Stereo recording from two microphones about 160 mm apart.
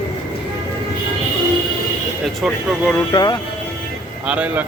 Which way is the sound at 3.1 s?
30° left (ahead or behind).